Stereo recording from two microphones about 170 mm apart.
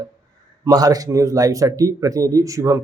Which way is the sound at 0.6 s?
20° right (ahead or behind).